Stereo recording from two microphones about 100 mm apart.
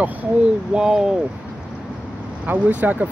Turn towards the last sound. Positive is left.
turn(degrees=-15)  # may be behind; listen again after turning